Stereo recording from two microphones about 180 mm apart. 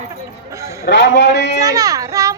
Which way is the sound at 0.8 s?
80° left.